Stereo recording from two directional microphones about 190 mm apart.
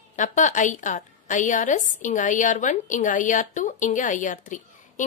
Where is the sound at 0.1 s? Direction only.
40° left (ahead or behind).